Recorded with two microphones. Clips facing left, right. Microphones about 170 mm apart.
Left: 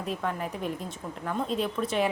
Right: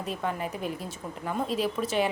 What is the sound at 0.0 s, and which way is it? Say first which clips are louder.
Speech: even; centre (ahead or behind).